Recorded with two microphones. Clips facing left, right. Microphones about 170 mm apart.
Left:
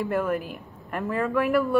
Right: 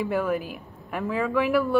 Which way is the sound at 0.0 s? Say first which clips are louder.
Even; centre (ahead or behind).